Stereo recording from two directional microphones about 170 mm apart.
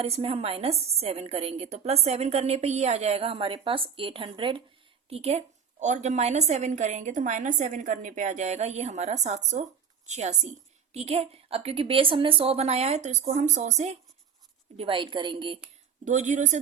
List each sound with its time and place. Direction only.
0.0 s a woman's voice: 35° right (ahead or behind)
14.8 s a woman's voice: 30° right (ahead or behind)
16.0 s a woman's voice: 45° right (ahead or behind)